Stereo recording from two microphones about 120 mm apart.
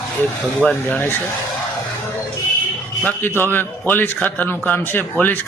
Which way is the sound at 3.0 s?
15° left (ahead or behind).